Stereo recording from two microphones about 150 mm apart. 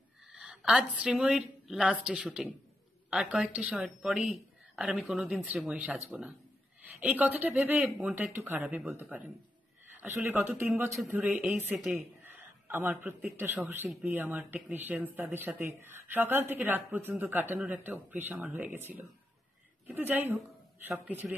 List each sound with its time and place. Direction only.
0.3 s a woman's voice: 5° right (ahead or behind)
7.0 s speech: 10° right (ahead or behind)
12.4 s speech: 15° right (ahead or behind)